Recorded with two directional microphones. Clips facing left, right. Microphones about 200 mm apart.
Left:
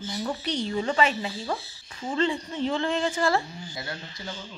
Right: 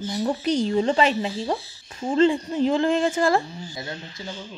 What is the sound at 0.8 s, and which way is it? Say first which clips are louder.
Speech: right 5 dB; 35° right (ahead or behind).